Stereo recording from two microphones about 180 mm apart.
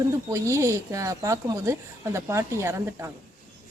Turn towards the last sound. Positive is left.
turn(degrees=-15)  # may be behind; listen again after turning